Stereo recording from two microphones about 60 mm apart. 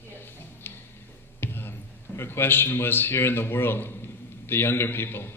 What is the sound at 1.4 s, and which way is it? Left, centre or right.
A man's voice, left.